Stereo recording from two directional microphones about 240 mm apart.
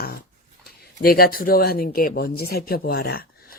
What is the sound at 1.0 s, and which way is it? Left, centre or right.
Speech, left.